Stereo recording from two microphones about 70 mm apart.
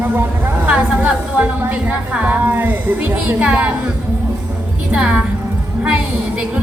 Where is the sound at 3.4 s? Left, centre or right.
Centre.